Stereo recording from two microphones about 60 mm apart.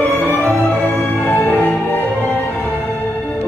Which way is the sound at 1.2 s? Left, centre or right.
Left.